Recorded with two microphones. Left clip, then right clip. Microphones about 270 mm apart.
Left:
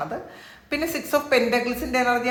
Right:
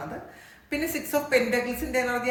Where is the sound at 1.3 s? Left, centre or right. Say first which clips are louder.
Left 2 dB; centre.